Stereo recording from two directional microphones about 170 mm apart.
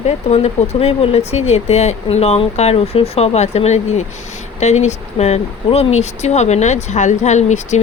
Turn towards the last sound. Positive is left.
turn(degrees=45)  # may be behind; listen again after turning